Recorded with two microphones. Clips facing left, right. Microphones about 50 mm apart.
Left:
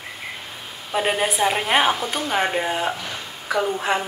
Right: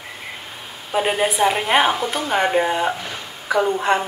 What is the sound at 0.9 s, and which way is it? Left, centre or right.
Speech, centre.